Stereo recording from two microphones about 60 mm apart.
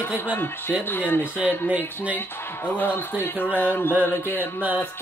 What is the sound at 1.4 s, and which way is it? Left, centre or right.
Speech, right.